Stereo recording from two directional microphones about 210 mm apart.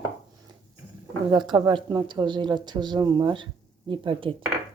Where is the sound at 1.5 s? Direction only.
20° right (ahead or behind).